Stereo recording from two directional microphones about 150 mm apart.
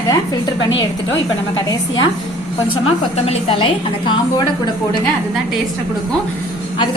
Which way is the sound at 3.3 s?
40° left (ahead or behind).